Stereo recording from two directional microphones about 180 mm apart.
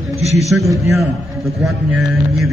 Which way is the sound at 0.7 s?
15° right (ahead or behind).